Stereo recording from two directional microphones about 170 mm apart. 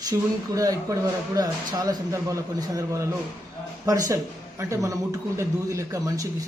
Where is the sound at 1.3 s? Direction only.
20° right (ahead or behind).